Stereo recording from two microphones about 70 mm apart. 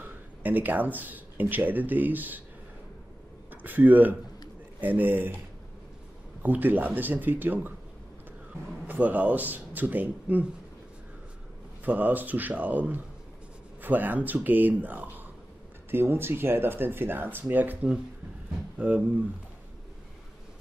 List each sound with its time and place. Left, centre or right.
0.0 s speech: right
3.6 s a man's voice: right
6.4 s a man's voice: right
8.8 s a man's voice: right
11.8 s a man's voice: right
18.8 s a man's voice: right